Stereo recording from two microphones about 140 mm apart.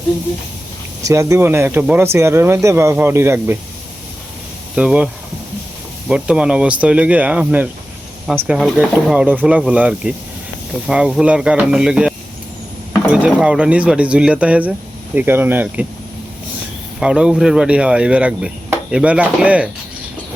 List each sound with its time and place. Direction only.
1.0 s speech: 20° right (ahead or behind)
4.7 s speech: 10° right (ahead or behind)
6.1 s speech: 5° right (ahead or behind)
17.0 s speech: 5° right (ahead or behind)